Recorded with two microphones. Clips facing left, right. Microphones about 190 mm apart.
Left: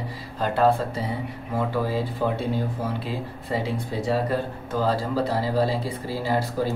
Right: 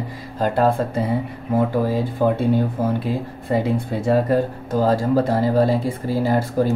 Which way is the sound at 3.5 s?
55° right (ahead or behind).